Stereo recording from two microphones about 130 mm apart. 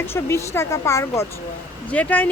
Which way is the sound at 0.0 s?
20° left (ahead or behind).